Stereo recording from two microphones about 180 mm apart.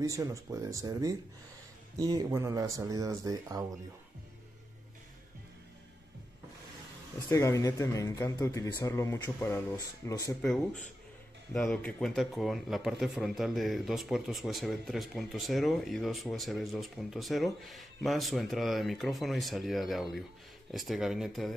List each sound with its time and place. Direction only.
0.0 s speech: 20° right (ahead or behind)
7.2 s speech: 15° left (ahead or behind)
11.5 s speech: 5° left (ahead or behind)